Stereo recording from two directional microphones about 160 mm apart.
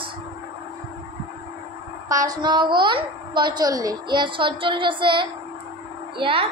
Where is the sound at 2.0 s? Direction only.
20° right (ahead or behind).